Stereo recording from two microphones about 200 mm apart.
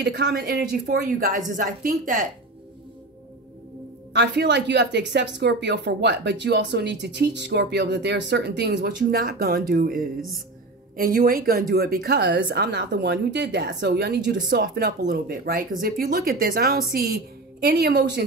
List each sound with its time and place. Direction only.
0.0 s a woman's voice: 55° right (ahead or behind)
4.1 s a woman's voice: 60° right (ahead or behind)